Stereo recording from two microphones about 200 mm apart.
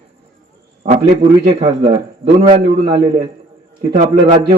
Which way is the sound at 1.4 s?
30° right (ahead or behind).